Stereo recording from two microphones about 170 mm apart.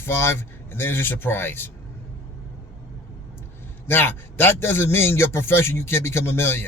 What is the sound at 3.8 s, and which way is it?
A man's voice, 15° left (ahead or behind).